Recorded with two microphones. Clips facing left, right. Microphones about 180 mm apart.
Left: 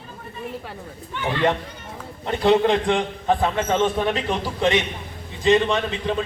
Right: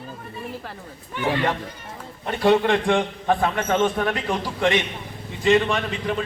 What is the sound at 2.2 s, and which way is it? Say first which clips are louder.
A man's voice: left 1 dB; 20° left (ahead or behind).